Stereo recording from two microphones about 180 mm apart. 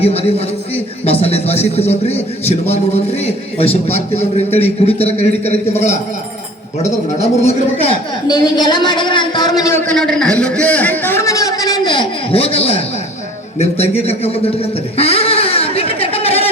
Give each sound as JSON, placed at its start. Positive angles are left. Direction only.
{"t": 0.0, "sound": "a man's voice", "side_deg": 35}
{"t": 9.9, "sound": "a man's voice", "side_deg": 5}
{"t": 14.0, "sound": "a sound", "side_deg": 35}